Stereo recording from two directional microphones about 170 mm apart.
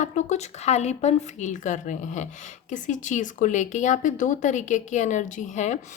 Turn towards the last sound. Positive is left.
turn(degrees=45)  # may be behind; listen again after turning